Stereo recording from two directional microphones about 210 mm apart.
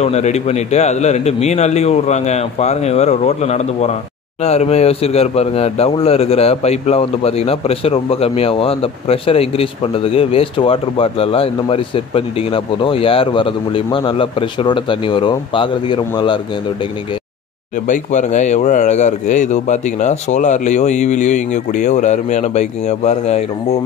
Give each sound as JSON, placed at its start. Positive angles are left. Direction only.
{"t": 0.0, "sound": "a man's voice", "side_deg": 30}
{"t": 17.8, "sound": "speech", "side_deg": 35}